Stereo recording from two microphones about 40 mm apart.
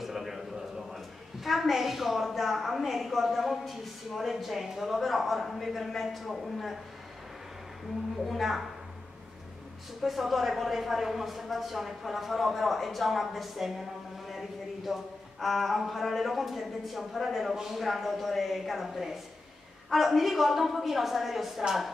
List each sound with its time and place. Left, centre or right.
0.0 s a woman's voice: centre
8.3 s speech: centre
10.0 s speech: centre
14.9 s speech: centre